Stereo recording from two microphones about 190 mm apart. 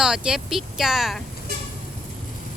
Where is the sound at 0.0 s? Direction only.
5° right (ahead or behind).